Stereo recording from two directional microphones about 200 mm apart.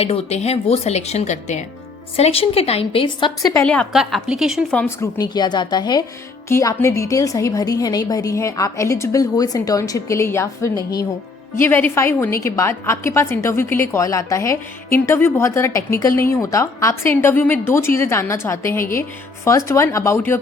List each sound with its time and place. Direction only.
0.0 s a woman's voice: 30° left (ahead or behind)
3.6 s a woman's voice: 5° left (ahead or behind)